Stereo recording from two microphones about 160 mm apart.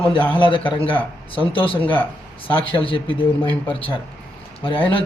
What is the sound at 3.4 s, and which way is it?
Speech, 10° left (ahead or behind).